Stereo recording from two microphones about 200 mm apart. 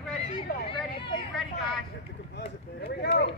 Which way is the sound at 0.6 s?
25° left (ahead or behind).